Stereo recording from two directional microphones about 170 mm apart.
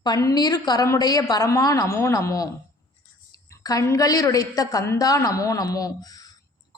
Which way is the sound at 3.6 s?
20° left (ahead or behind).